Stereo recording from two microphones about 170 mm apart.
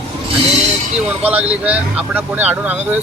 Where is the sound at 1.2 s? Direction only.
5° right (ahead or behind).